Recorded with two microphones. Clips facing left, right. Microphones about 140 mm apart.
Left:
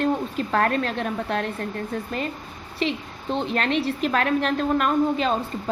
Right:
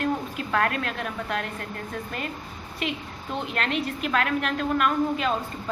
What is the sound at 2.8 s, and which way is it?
A woman's voice, 30° left (ahead or behind).